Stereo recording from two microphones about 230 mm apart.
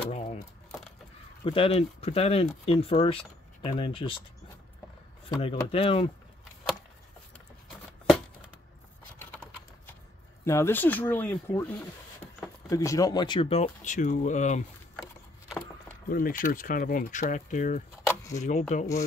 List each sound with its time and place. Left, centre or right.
0.1 s a sound: left
1.4 s speech: left
5.4 s speech: left
10.4 s speech: centre
12.6 s speech: centre; by 14.6 s left
16.1 s speech: left
18.0 s a sound: centre
18.4 s speech: left